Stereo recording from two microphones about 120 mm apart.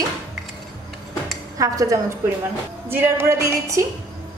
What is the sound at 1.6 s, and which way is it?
A woman's voice, 25° right (ahead or behind).